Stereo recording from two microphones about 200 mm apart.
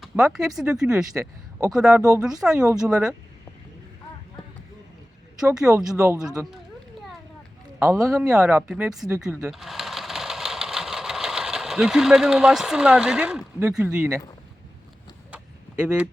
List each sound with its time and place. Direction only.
0.0 s speech: centre (ahead or behind)
1.1 s speech: 15° right (ahead or behind)
1.7 s speech: 5° right (ahead or behind)
2.0 s speech: 15° right (ahead or behind)
2.4 s speech: 5° right (ahead or behind)
5.5 s speech: 5° right (ahead or behind)
5.9 s speech: 15° right (ahead or behind)
7.8 s speech: 15° right (ahead or behind)
8.3 s speech: 5° right (ahead or behind)
9.2 s sewing machine: 5° right (ahead or behind)